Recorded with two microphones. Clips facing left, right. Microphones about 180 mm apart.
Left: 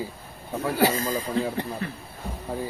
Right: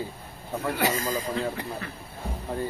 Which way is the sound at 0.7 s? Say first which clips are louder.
Left 5 dB; 35° left (ahead or behind).